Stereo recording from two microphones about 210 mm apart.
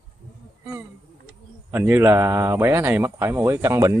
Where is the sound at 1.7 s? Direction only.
10° right (ahead or behind).